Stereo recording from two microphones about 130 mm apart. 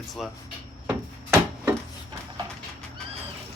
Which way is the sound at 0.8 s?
15° right (ahead or behind).